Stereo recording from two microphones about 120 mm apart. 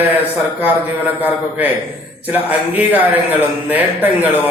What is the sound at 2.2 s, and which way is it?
A man's voice, 15° right (ahead or behind).